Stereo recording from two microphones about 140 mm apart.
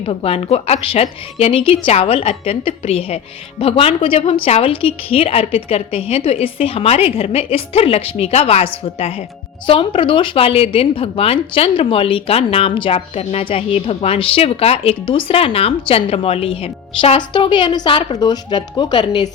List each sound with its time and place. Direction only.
0.0 s a woman's voice: 45° left (ahead or behind)